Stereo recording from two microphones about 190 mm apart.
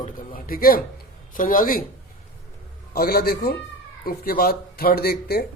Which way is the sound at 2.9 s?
55° left (ahead or behind).